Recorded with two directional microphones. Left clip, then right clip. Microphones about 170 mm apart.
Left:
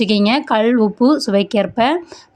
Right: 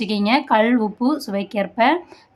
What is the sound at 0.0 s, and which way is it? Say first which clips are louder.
Speech: left 4 dB; 35° left (ahead or behind).